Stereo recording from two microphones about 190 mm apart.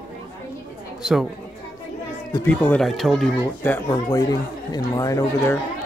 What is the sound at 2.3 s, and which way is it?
Speech, 10° left (ahead or behind).